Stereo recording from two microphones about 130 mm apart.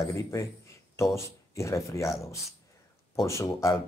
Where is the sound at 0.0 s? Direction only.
20° left (ahead or behind).